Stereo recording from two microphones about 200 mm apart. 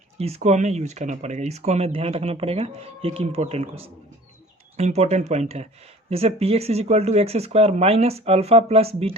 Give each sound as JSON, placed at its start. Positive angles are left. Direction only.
{"t": 0.2, "sound": "speech", "side_deg": -30}